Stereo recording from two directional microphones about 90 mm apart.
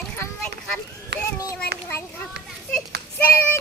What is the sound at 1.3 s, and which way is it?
Children playing, 35° left (ahead or behind).